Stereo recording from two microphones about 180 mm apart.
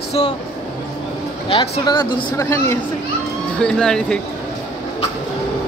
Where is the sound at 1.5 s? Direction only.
25° left (ahead or behind).